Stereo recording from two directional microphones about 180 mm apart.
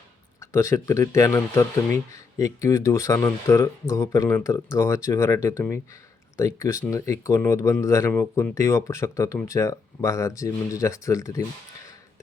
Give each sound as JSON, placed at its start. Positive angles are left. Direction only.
{"t": 0.3, "sound": "speech", "side_deg": 15}